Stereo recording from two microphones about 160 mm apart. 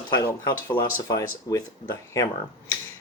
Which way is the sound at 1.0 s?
20° left (ahead or behind).